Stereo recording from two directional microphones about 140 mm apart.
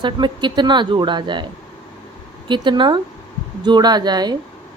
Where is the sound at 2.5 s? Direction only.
35° right (ahead or behind).